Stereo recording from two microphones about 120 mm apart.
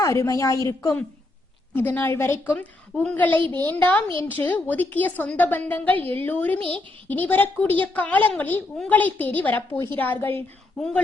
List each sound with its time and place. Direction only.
0.0 s a woman's voice: 25° left (ahead or behind)